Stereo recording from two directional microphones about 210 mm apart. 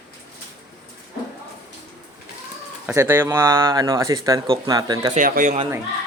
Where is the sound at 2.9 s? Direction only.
10° right (ahead or behind).